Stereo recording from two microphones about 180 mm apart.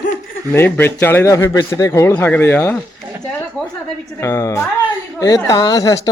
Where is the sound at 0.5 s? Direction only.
10° left (ahead or behind).